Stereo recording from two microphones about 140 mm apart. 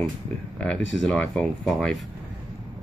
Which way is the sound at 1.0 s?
5° left (ahead or behind).